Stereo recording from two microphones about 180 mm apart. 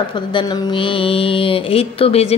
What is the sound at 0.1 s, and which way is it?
Speech, 25° left (ahead or behind).